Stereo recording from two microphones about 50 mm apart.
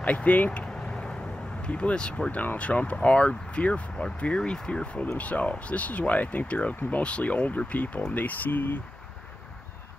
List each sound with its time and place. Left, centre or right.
0.0 s speech: left
0.5 s vehicle: centre
1.6 s speech: left
5.0 s speech: left